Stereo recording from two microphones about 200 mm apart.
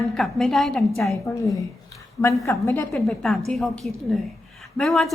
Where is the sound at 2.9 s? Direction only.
5° left (ahead or behind).